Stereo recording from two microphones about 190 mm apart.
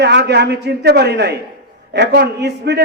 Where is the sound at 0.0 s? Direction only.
65° right (ahead or behind).